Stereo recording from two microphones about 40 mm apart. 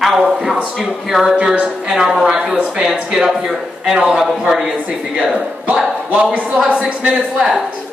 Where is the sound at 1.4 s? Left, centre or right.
Right.